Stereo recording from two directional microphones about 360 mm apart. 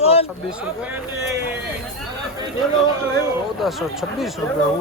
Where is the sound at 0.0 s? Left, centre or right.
Centre.